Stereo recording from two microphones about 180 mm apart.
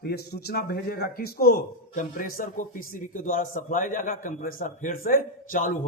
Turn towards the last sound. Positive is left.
turn(degrees=50)  # may be behind; listen again after turning